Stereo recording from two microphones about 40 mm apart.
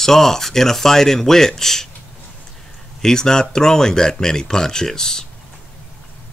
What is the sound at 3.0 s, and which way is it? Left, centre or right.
Speech, centre.